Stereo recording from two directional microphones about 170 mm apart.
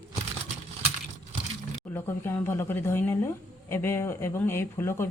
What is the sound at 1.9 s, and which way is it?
Speech, 15° left (ahead or behind).